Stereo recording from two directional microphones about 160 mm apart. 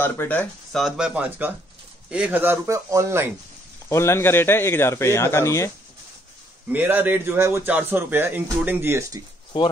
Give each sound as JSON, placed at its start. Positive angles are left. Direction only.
{"t": 0.0, "sound": "a man's voice", "side_deg": 10}
{"t": 0.7, "sound": "speech", "side_deg": -5}
{"t": 3.9, "sound": "a man's voice", "side_deg": 15}
{"t": 6.7, "sound": "speech", "side_deg": -10}